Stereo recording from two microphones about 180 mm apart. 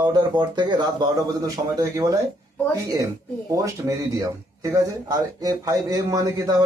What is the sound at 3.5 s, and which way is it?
Speech, 20° right (ahead or behind).